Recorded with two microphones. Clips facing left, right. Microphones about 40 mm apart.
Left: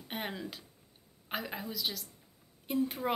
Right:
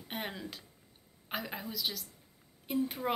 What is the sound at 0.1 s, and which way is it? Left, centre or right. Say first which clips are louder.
Speech: left 1 dB; centre.